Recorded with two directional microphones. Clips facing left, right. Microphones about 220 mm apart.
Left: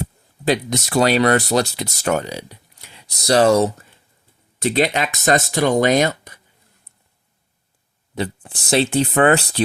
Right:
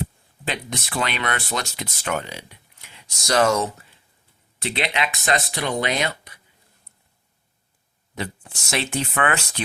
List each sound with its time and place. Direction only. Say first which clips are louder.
0.4 s speech: left 10 dB; 40° left (ahead or behind)
8.5 s speech: left 9 dB; 35° left (ahead or behind)